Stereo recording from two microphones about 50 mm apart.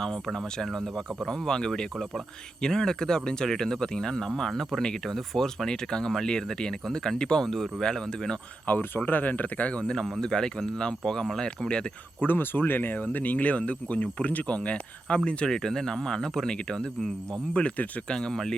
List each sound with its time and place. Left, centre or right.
0.3 s speech: centre
8.6 s speech: left
9.8 s speech: centre
12.2 s speech: left
18.1 s speech: centre